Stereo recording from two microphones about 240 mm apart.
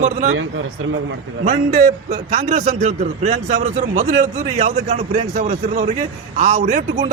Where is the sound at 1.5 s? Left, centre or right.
Right.